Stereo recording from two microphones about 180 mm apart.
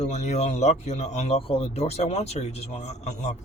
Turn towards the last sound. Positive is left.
turn(degrees=40)  # may be behind; listen again after turning